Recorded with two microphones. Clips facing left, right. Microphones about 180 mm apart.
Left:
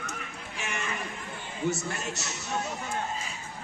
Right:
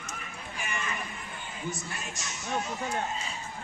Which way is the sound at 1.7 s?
75° left (ahead or behind).